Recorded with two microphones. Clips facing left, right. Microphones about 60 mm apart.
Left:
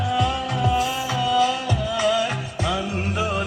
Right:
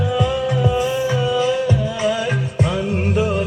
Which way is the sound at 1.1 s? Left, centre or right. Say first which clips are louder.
Right 2 dB; right.